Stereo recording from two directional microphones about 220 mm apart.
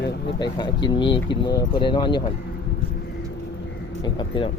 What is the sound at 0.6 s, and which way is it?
Speech, 20° left (ahead or behind).